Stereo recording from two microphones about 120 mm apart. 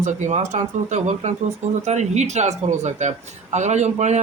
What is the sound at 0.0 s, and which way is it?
Speech, 80° right.